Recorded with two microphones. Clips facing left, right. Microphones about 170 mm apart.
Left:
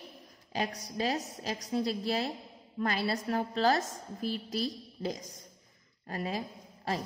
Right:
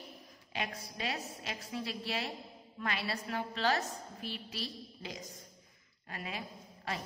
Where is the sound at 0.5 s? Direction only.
40° left (ahead or behind).